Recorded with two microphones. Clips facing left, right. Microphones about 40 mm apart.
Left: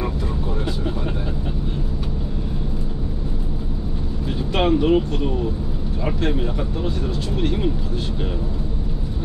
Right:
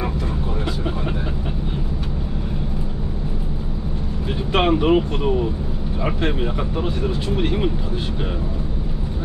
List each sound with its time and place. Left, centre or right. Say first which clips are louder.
4.5 s speech: right 1 dB; right